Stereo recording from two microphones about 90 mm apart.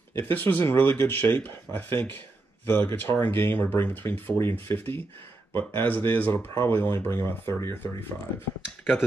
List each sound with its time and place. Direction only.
0.1 s speech: 20° left (ahead or behind)
8.6 s speech: 5° right (ahead or behind)